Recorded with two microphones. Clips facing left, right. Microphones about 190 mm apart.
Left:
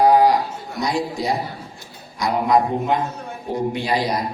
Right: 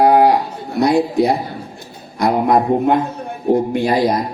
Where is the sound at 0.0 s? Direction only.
60° right (ahead or behind).